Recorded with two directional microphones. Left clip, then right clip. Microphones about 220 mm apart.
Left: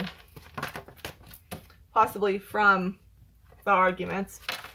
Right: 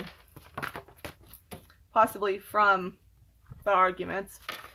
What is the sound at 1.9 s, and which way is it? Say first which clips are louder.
Speech: left 1 dB; 50° right (ahead or behind).